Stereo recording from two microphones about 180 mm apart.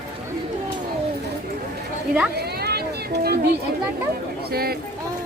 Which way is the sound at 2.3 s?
60° right (ahead or behind).